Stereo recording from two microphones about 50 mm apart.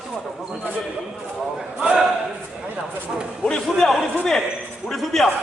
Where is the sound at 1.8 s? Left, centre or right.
Centre.